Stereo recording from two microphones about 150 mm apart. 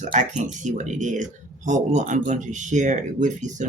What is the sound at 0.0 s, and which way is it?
Speech, 55° right (ahead or behind).